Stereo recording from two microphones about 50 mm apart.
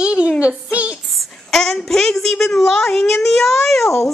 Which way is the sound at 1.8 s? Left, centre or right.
Centre.